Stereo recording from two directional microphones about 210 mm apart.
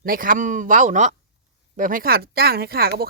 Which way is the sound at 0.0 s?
40° right (ahead or behind).